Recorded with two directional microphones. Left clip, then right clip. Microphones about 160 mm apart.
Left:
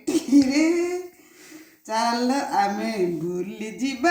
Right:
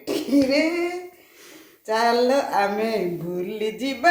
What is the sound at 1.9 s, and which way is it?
Music, 30° right (ahead or behind).